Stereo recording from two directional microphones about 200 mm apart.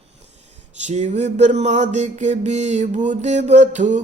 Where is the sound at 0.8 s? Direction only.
35° right (ahead or behind).